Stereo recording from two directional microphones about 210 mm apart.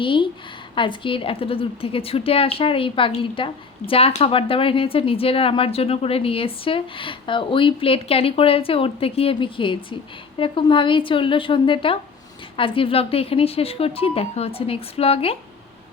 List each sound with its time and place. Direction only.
0.0 s a woman's voice: 25° left (ahead or behind)